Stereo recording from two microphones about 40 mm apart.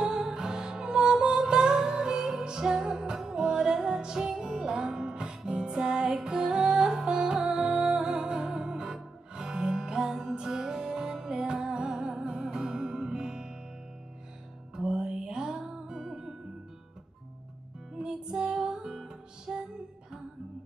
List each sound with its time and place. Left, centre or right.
0.0 s music: centre
14.8 s music: right
17.9 s music: centre